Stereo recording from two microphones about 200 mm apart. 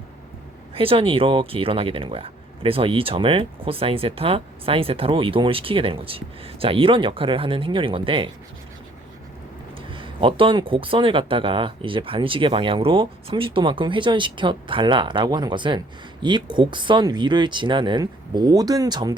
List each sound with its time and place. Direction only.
0.7 s speech: 30° right (ahead or behind)
9.9 s speech: 25° right (ahead or behind)